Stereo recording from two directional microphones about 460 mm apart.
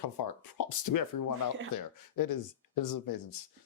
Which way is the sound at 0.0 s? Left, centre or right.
Left.